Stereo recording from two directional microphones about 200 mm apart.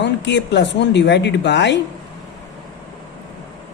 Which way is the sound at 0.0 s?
60° left (ahead or behind).